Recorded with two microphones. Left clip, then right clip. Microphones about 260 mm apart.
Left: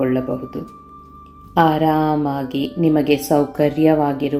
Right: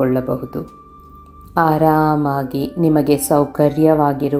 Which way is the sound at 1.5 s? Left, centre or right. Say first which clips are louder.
Right 2 dB; centre.